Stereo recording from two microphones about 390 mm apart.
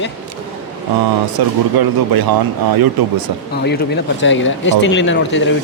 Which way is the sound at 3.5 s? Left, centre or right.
Left.